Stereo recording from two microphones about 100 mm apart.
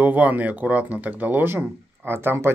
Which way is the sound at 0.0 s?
15° right (ahead or behind).